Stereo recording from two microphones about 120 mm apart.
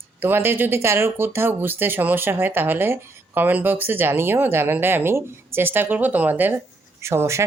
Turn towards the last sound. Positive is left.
turn(degrees=-25)  # may be behind; listen again after turning